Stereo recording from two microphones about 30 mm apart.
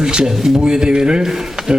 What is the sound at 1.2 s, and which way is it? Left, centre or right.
Speech, centre.